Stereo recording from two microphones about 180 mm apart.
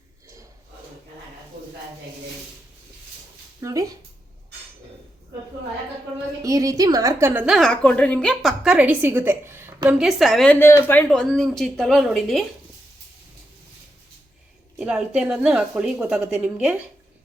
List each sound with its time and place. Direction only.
3.6 s speech: 20° right (ahead or behind)
6.4 s a woman's voice: 20° right (ahead or behind); by 12.5 s centre (ahead or behind)
14.8 s a woman's voice: 5° right (ahead or behind)